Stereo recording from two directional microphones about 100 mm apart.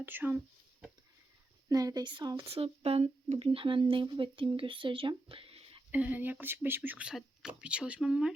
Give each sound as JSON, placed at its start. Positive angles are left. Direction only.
{"t": 0.0, "sound": "speech", "side_deg": -20}
{"t": 1.7, "sound": "speech", "side_deg": -40}
{"t": 5.9, "sound": "speech", "side_deg": -15}
{"t": 7.1, "sound": "speech", "side_deg": -5}